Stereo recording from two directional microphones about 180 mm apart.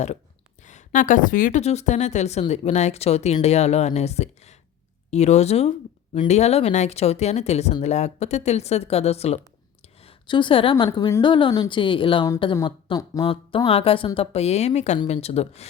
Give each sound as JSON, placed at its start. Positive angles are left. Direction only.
{"t": 0.6, "sound": "speech", "side_deg": 40}
{"t": 9.8, "sound": "a sound", "side_deg": 35}
{"t": 10.8, "sound": "a woman's voice", "side_deg": 15}